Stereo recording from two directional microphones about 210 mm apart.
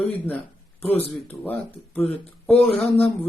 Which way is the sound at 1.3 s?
5° left (ahead or behind).